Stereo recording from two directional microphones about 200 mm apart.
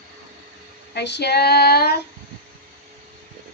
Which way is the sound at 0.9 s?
60° left (ahead or behind).